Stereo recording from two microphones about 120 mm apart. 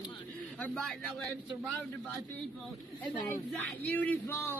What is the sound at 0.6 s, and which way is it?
Speech, 10° left (ahead or behind).